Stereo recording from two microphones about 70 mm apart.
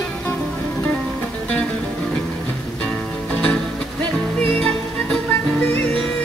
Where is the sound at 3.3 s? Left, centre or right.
Centre.